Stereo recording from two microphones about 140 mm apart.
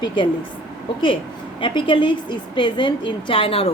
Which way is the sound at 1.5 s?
35° left (ahead or behind).